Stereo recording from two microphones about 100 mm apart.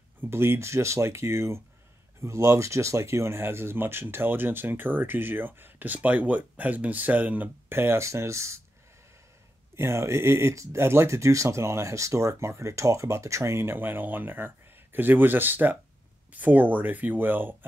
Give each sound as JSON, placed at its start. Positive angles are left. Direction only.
{"t": 0.2, "sound": "speech", "side_deg": -25}
{"t": 9.8, "sound": "speech", "side_deg": -25}